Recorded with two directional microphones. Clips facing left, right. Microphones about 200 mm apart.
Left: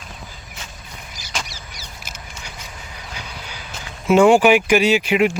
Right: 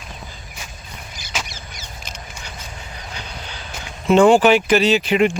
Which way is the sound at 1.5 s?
35° left (ahead or behind).